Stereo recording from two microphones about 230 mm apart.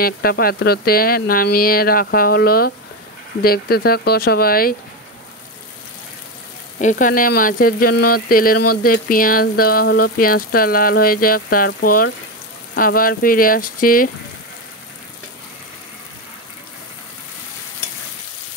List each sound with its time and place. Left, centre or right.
0.0 s speech: left
6.8 s speech: left